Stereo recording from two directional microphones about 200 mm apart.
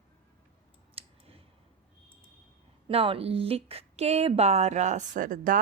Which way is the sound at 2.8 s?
25° right (ahead or behind).